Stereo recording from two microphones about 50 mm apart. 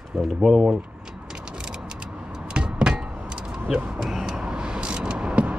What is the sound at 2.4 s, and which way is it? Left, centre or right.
Vehicle, right.